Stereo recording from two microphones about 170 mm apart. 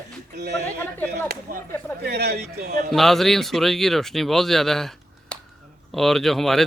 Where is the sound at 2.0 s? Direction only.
70° right (ahead or behind).